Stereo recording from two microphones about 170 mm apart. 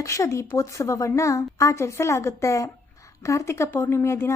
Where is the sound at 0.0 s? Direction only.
15° left (ahead or behind).